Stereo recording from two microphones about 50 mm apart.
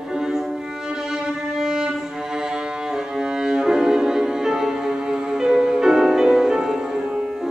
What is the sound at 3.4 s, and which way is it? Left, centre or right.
Music, centre.